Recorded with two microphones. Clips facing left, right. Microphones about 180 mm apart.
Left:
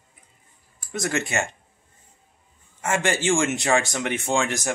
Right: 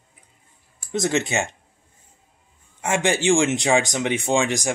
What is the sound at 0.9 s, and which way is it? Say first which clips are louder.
Speech: right 4 dB; 20° right (ahead or behind).